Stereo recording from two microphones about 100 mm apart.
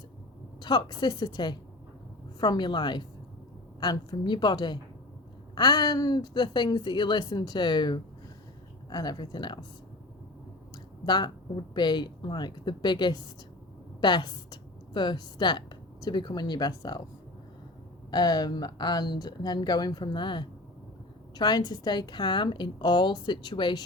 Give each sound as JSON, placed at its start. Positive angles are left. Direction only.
{"t": 0.6, "sound": "a woman's voice", "side_deg": 45}
{"t": 11.0, "sound": "a woman's voice", "side_deg": 45}
{"t": 18.1, "sound": "a woman's voice", "side_deg": 45}